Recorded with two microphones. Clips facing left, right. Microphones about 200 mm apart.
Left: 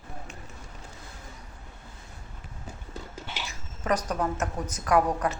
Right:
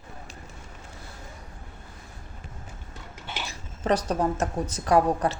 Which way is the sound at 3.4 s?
30° right (ahead or behind).